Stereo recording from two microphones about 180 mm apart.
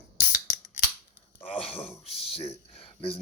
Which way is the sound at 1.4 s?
30° left (ahead or behind).